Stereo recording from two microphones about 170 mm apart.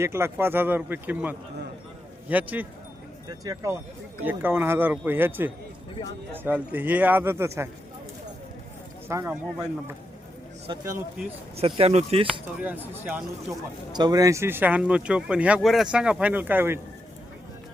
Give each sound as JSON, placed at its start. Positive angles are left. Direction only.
{"t": 0.0, "sound": "speech", "side_deg": -15}
{"t": 9.0, "sound": "speech", "side_deg": -15}
{"t": 11.5, "sound": "speech", "side_deg": -35}
{"t": 12.3, "sound": "speech", "side_deg": -10}
{"t": 13.9, "sound": "speech", "side_deg": -25}